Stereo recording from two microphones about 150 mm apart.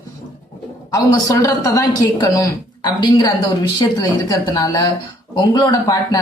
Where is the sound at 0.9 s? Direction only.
20° left (ahead or behind).